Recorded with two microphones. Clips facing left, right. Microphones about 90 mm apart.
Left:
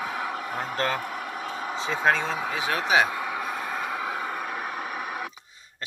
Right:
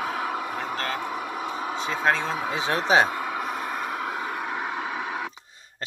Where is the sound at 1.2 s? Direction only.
15° right (ahead or behind).